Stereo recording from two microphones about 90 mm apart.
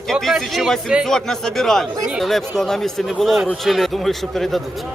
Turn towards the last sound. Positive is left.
turn(degrees=0)  # may be behind; listen again after turning